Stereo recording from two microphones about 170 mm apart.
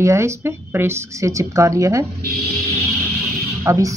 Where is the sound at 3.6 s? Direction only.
20° right (ahead or behind).